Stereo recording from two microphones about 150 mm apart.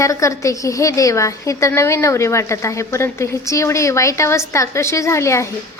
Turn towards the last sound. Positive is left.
turn(degrees=20)  # may be behind; listen again after turning